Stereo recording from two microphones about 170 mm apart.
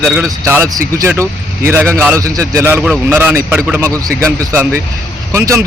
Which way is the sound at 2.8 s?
5° right (ahead or behind).